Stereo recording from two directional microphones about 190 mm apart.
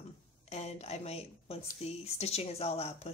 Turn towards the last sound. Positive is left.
turn(degrees=35)  # may be behind; listen again after turning